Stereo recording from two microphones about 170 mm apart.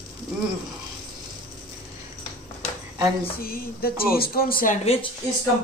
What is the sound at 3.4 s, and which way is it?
Speech, 60° left (ahead or behind).